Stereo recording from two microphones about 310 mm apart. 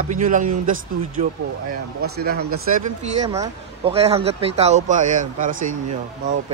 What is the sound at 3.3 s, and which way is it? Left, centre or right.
Speech, centre.